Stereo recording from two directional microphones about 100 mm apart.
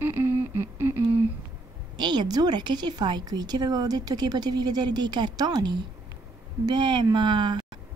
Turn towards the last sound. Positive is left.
turn(degrees=-50)  # may be behind; listen again after turning